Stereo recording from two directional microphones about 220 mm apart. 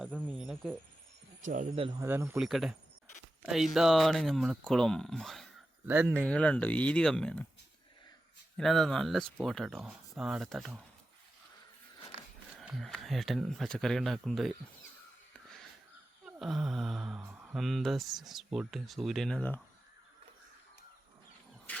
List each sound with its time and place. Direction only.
0.0 s speech: 5° right (ahead or behind)
1.4 s speech: 35° right (ahead or behind)
2.0 s speech: 10° right (ahead or behind)
6.2 s speech: 5° left (ahead or behind)
8.5 s speech: centre (ahead or behind)
12.5 s speech: centre (ahead or behind)
16.2 s speech: centre (ahead or behind)
21.7 s vehicle: 5° left (ahead or behind)